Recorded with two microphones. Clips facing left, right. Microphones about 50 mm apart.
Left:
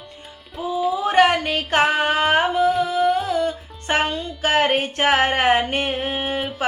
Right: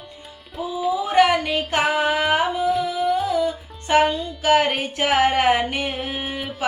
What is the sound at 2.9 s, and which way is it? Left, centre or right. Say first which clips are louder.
Music: left 2 dB; left.